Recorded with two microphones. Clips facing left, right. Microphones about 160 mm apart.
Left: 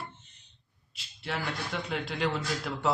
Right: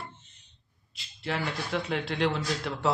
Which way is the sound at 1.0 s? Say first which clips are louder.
Right 3 dB; centre (ahead or behind).